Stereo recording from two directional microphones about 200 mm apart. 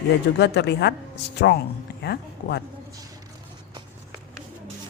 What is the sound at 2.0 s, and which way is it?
Speech, 55° left (ahead or behind).